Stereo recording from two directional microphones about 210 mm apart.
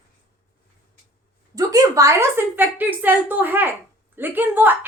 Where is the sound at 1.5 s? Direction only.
15° right (ahead or behind).